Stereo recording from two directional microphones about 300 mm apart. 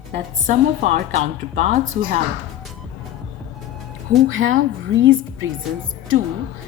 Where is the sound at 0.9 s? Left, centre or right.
Right.